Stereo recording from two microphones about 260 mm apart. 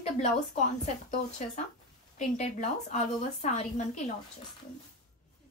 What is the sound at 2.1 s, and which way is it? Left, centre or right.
A woman's voice, left.